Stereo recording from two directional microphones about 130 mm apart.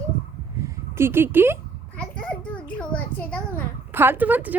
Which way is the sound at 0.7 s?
20° right (ahead or behind).